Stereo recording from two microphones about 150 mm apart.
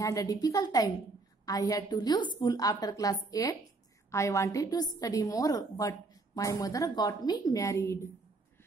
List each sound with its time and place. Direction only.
0.0 s a woman's voice: 20° left (ahead or behind)